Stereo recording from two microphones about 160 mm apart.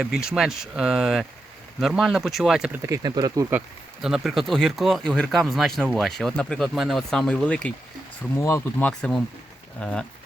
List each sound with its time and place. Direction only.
0.0 s speech: 5° right (ahead or behind); by 3.4 s 25° right (ahead or behind)
4.0 s speech: centre (ahead or behind); by 8.9 s 15° left (ahead or behind)
8.9 s speech: 5° left (ahead or behind)